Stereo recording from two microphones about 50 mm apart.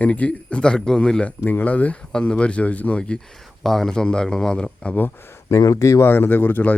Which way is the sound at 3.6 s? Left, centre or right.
Centre.